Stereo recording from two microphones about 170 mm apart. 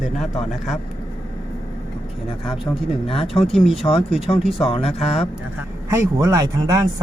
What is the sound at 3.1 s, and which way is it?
Speech, 35° left (ahead or behind).